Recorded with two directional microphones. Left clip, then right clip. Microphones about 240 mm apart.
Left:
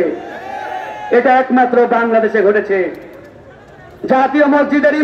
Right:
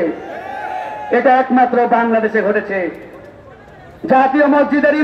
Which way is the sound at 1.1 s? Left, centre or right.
Left.